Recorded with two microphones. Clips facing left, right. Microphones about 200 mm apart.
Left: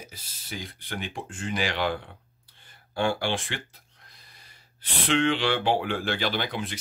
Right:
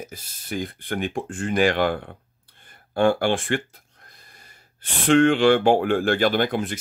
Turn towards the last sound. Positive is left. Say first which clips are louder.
# right 8 dB
turn(degrees=-50)  # may be behind; listen again after turning